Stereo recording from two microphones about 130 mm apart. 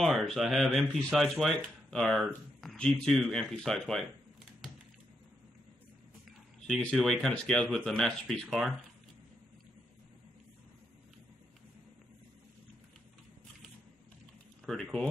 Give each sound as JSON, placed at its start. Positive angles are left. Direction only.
{"t": 0.0, "sound": "speech", "side_deg": 0}
{"t": 6.8, "sound": "speech", "side_deg": 5}
{"t": 14.7, "sound": "speech", "side_deg": 5}